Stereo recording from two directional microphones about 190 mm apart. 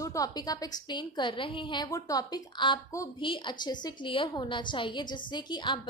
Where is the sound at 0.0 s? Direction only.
20° left (ahead or behind).